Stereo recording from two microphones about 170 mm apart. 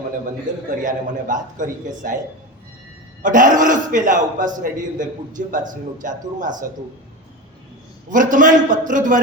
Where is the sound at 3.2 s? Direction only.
50° right (ahead or behind).